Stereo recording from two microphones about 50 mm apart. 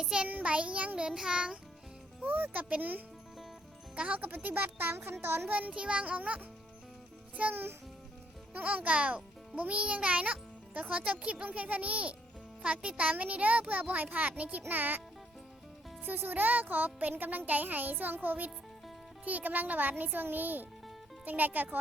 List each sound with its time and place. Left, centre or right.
0.0 s child singing: centre
0.3 s child singing: right
1.1 s music: centre
2.2 s speech: right
4.4 s speech: right
5.2 s speech: right
5.5 s speech: right
5.7 s child singing: right
7.5 s speech: right
8.5 s child singing: right
12.6 s speech: right
16.0 s speech: right